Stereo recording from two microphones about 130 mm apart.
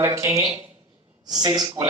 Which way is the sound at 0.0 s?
20° right (ahead or behind).